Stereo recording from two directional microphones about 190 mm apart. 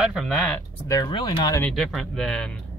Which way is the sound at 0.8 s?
20° left (ahead or behind).